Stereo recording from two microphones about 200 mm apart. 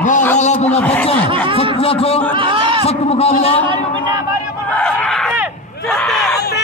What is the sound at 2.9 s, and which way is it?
Speech, 30° left (ahead or behind).